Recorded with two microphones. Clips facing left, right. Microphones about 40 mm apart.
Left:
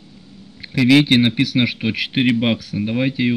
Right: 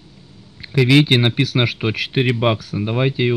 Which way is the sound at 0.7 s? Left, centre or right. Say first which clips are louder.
Left 1 dB; centre.